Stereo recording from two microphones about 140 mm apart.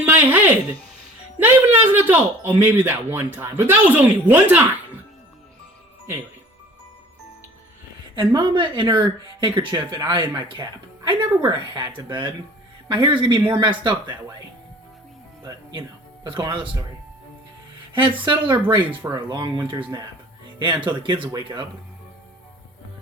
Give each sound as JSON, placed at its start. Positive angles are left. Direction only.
{"t": 0.0, "sound": "a sound", "side_deg": -15}
{"t": 1.4, "sound": "speech", "side_deg": -15}
{"t": 8.1, "sound": "speech", "side_deg": -35}
{"t": 16.2, "sound": "speech", "side_deg": -35}
{"t": 17.9, "sound": "speech", "side_deg": -40}